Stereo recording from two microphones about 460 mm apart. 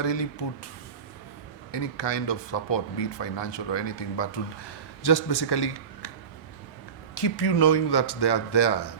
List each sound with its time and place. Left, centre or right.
0.0 s speech: left
1.7 s speech: left
7.2 s speech: left